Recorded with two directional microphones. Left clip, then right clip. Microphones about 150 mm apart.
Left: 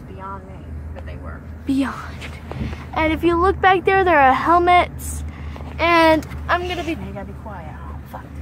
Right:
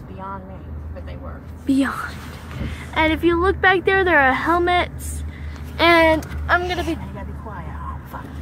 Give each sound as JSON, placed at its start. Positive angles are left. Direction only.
{"t": 1.7, "sound": "speech", "side_deg": 0}
{"t": 5.8, "sound": "speech", "side_deg": -20}
{"t": 6.4, "sound": "speech", "side_deg": 5}